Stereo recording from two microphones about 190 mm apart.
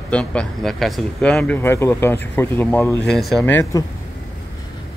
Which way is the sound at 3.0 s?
Centre (ahead or behind).